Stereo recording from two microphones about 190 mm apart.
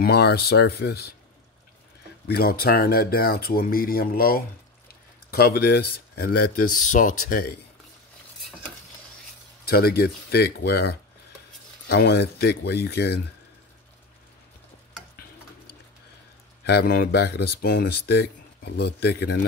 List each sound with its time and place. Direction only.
0.0 s speech: 55° left (ahead or behind)
2.2 s speech: 55° left (ahead or behind)
9.7 s speech: 55° left (ahead or behind)
16.6 s speech: 55° left (ahead or behind)